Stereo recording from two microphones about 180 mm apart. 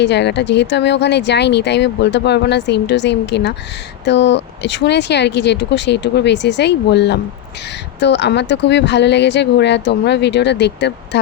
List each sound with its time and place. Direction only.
0.0 s speech: 75° left (ahead or behind)